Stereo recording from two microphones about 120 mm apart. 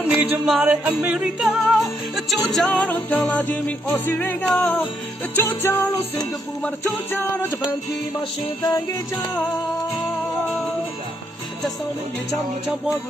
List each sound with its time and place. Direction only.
0.1 s music: 10° right (ahead or behind)
1.8 s music: centre (ahead or behind); by 5.8 s 20° left (ahead or behind)
7.1 s music: 20° left (ahead or behind)